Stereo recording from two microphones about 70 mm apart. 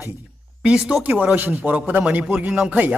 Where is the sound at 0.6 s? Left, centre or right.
Centre.